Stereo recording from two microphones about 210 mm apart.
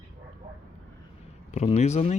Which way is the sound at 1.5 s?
35° left (ahead or behind).